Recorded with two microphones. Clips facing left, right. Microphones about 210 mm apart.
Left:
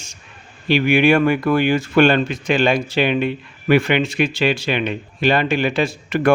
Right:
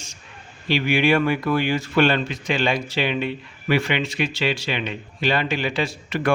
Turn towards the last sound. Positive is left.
turn(degrees=50)  # may be behind; listen again after turning